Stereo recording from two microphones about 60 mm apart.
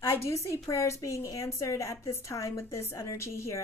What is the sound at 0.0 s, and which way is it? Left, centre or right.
A woman's voice, left.